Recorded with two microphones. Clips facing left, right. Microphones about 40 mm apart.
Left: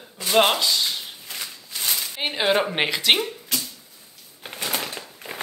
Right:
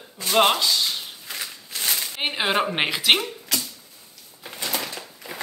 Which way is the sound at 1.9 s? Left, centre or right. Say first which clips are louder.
Even; centre.